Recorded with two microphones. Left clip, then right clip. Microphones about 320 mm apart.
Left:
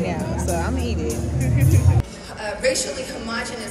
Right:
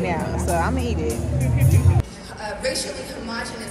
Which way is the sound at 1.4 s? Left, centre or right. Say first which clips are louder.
Left 4 dB; left.